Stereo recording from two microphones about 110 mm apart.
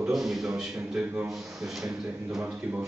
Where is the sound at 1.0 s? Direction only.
15° right (ahead or behind).